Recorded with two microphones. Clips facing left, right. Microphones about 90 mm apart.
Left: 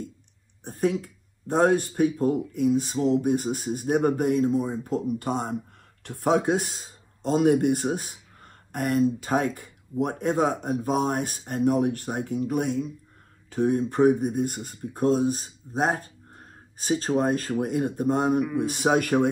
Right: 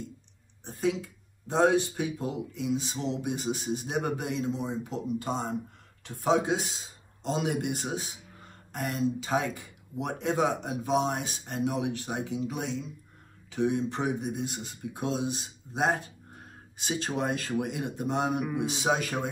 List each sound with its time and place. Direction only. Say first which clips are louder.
0.7 s speech: left 4 dB; 55° left (ahead or behind)
18.4 s speech: left 5 dB; 10° right (ahead or behind)
18.7 s speech: left 6 dB; 50° left (ahead or behind)